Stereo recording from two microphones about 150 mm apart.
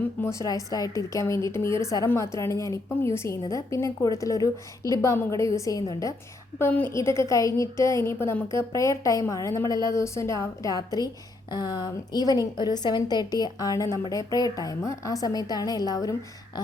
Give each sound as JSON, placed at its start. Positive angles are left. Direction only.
{"t": 0.2, "sound": "a woman's voice", "side_deg": 20}